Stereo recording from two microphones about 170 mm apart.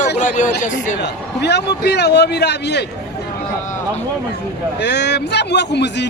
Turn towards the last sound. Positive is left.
turn(degrees=90)